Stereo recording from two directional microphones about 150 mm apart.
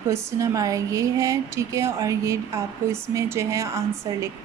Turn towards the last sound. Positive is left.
turn(degrees=-20)  # may be behind; listen again after turning